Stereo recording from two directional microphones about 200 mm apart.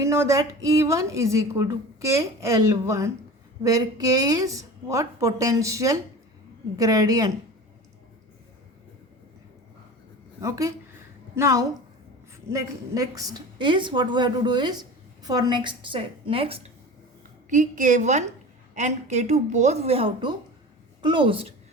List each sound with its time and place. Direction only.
0.0 s a woman's voice: 15° right (ahead or behind)
10.4 s a woman's voice: 15° right (ahead or behind)
17.5 s a woman's voice: 40° right (ahead or behind)